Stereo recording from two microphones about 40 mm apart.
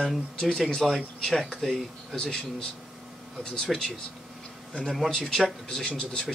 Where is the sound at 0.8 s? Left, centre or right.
Centre.